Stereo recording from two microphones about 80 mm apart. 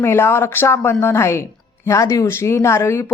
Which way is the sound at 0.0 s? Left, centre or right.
Left.